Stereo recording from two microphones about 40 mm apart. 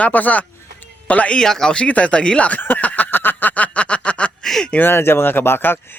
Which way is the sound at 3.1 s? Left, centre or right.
Left.